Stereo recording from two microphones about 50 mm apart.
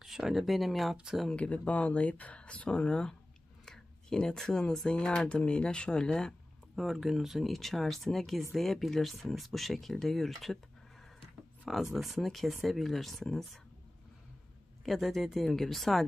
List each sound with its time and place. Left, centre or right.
0.0 s speech: centre
1.3 s speech: left
6.7 s speech: centre
14.9 s speech: centre